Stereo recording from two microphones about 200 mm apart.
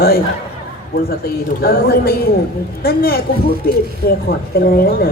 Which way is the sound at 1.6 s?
50° left (ahead or behind).